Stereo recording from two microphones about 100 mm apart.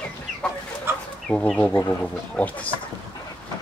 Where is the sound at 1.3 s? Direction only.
10° left (ahead or behind).